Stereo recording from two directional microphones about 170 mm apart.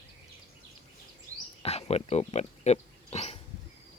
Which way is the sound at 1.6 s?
35° left (ahead or behind).